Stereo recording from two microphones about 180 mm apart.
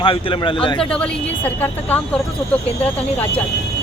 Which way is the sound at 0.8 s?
5° left (ahead or behind).